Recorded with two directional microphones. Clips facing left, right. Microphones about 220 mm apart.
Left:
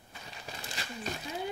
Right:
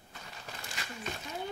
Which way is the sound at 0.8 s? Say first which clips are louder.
Left 1 dB; 35° left (ahead or behind).